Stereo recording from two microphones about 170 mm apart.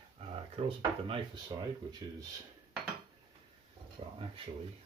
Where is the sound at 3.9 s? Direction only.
30° right (ahead or behind).